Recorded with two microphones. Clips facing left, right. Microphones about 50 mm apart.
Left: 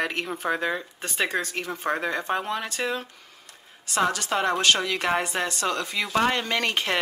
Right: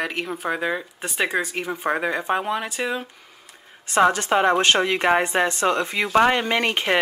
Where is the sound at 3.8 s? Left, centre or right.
Right.